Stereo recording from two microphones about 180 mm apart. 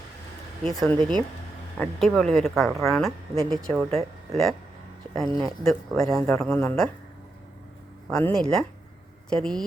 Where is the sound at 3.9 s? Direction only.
35° right (ahead or behind).